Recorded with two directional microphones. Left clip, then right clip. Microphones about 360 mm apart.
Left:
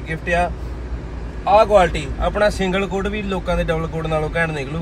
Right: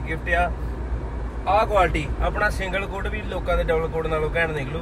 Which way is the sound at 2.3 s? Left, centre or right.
Centre.